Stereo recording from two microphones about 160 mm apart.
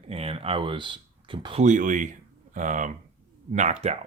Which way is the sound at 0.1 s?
40° right (ahead or behind).